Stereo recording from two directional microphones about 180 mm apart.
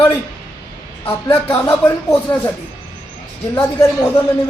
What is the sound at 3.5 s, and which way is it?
Speech, 10° left (ahead or behind).